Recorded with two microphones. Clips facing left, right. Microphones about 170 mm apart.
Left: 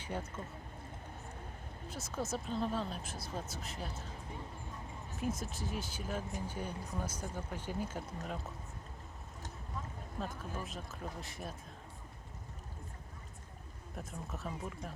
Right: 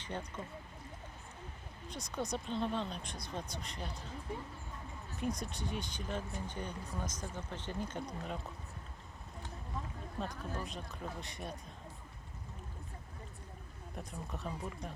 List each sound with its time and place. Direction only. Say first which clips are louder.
0.0 s speech: left 1 dB; 10° left (ahead or behind)
1.9 s speech: even; 5° left (ahead or behind)
5.1 s speech: even; 5° left (ahead or behind)
10.2 s speech: right 1 dB; centre (ahead or behind)
13.9 s speech: even; centre (ahead or behind)